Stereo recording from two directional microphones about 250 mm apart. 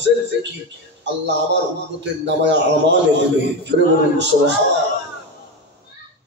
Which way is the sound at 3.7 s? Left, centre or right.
Right.